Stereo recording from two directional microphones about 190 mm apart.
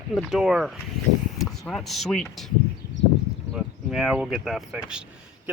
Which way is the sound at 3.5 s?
Centre (ahead or behind).